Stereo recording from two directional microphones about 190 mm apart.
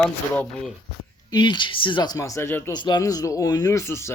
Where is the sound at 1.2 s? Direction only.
25° left (ahead or behind).